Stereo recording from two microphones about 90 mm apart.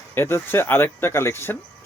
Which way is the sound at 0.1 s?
25° left (ahead or behind).